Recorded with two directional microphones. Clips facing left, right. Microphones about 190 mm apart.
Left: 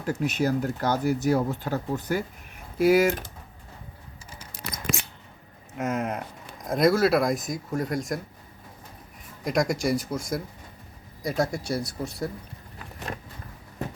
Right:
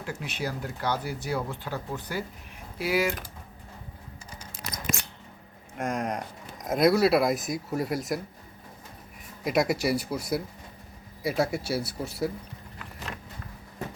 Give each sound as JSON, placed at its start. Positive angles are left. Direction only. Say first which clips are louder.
{"t": 0.0, "sound": "speech", "louder": "left 8 dB", "side_deg": 45}
{"t": 5.7, "sound": "speech", "louder": "left 2 dB", "side_deg": 5}
{"t": 9.4, "sound": "speech", "louder": "even", "side_deg": -5}